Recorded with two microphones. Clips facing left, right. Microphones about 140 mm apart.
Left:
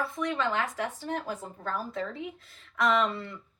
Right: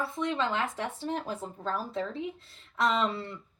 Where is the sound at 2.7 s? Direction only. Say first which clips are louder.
Left 2 dB; 30° right (ahead or behind).